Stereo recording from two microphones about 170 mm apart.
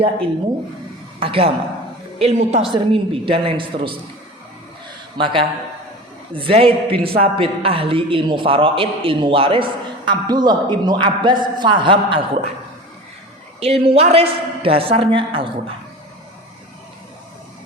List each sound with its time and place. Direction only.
1.2 s a man's voice: 35° right (ahead or behind)
5.1 s a man's voice: 30° right (ahead or behind)
13.6 s a man's voice: 35° right (ahead or behind)